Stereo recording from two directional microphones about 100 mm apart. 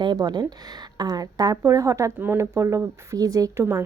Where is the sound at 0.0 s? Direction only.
45° right (ahead or behind).